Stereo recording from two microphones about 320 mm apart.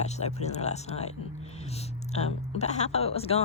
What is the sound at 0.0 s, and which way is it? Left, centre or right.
Speech, left.